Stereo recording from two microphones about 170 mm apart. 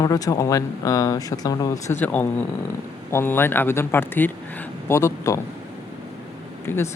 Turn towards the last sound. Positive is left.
turn(degrees=15)  # may be behind; listen again after turning